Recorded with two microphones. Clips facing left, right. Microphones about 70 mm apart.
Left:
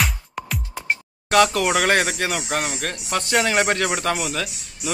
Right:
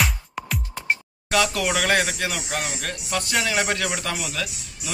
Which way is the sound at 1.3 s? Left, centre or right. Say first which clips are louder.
Left 5 dB; left.